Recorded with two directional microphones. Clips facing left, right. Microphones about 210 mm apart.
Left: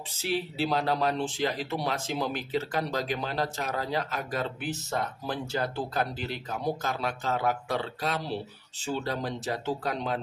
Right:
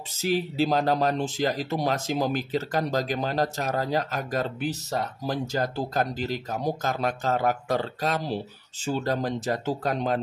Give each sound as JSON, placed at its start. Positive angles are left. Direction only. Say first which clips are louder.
{"t": 0.1, "sound": "speech", "louder": "right 5 dB", "side_deg": -40}